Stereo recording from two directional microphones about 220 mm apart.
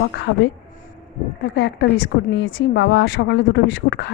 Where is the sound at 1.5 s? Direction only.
50° left (ahead or behind).